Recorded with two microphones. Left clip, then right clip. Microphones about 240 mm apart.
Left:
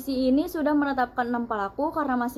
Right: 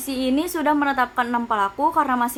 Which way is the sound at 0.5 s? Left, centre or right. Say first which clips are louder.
Right 5 dB; right.